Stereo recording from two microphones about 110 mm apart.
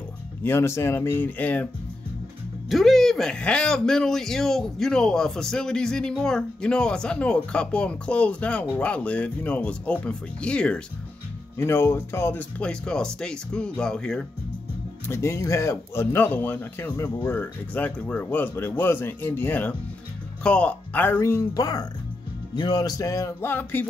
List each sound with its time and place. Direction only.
0.4 s speech: 25° left (ahead or behind)
2.7 s a man's voice: centre (ahead or behind)
11.5 s a man's voice: 20° left (ahead or behind); by 14.2 s 5° left (ahead or behind)
15.0 s a man's voice: 25° left (ahead or behind)
21.5 s speech: 35° left (ahead or behind); by 23.9 s 15° left (ahead or behind)